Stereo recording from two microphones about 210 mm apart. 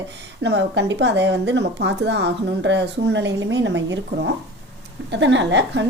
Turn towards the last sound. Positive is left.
turn(degrees=-60)  # may be behind; listen again after turning